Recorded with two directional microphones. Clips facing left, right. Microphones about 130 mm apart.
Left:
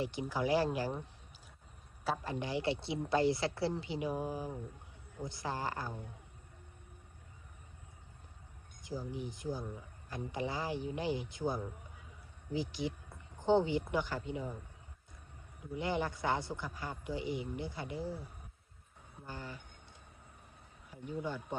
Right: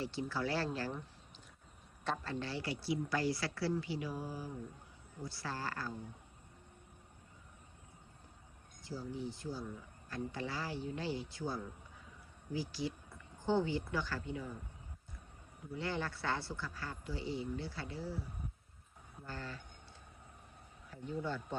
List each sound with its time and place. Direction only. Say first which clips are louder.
0.0 s speech: left 3 dB; 15° left (ahead or behind)
2.2 s speech: left 5 dB; 15° left (ahead or behind)
8.8 s speech: left 1 dB; 15° left (ahead or behind)
15.7 s speech: left 4 dB; 15° left (ahead or behind)
20.9 s speech: even; 15° left (ahead or behind)